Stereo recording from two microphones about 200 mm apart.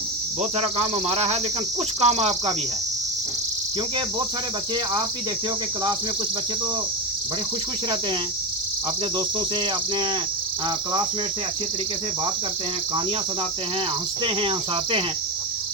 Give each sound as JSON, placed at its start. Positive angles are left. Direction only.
{"t": 0.5, "sound": "cricket", "side_deg": -30}